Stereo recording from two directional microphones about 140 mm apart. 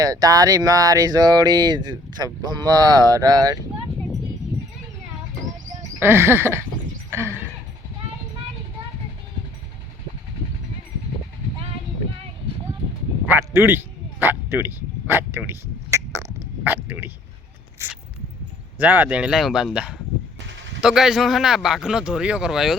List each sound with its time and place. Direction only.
0.0 s speech: 25° right (ahead or behind)
6.0 s speech: 15° right (ahead or behind)
7.1 s a sound: 20° right (ahead or behind)
13.2 s a sound: 15° right (ahead or behind)
16.6 s speech: 15° right (ahead or behind)
18.8 s speech: 10° right (ahead or behind)